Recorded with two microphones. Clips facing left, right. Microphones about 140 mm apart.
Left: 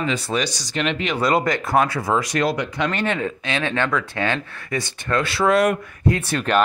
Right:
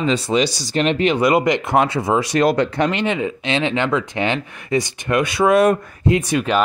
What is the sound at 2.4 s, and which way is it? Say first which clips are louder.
Speech: right 5 dB; 55° right (ahead or behind).